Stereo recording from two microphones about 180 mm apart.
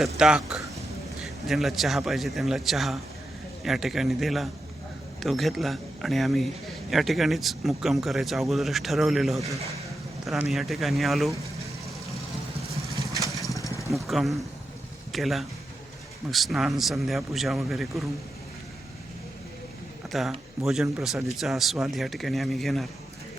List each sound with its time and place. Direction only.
0.2 s speech: 5° right (ahead or behind)
12.8 s vehicle: 15° right (ahead or behind)
13.6 s vehicle: 15° left (ahead or behind)
13.9 s speech: centre (ahead or behind)
20.1 s speech: centre (ahead or behind)